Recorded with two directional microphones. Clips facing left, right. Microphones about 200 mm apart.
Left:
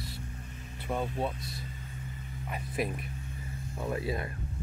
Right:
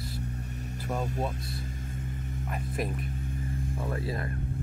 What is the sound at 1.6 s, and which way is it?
Vehicle, 45° right (ahead or behind).